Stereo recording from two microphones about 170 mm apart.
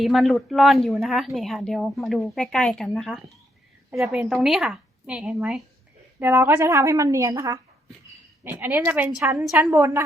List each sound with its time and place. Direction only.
0.0 s a woman's voice: centre (ahead or behind)
3.9 s a woman's voice: 15° right (ahead or behind)
4.2 s a woman's voice: centre (ahead or behind); by 7.9 s 20° right (ahead or behind)
8.4 s a woman's voice: 10° right (ahead or behind)